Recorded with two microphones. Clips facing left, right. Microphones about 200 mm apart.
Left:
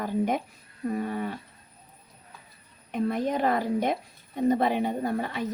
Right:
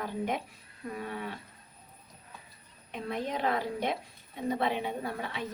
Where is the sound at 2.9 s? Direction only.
50° left (ahead or behind).